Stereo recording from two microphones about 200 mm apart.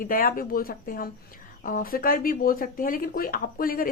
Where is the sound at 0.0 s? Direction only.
45° left (ahead or behind).